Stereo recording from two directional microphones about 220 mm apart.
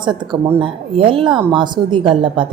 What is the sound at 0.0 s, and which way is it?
Speech, 20° right (ahead or behind).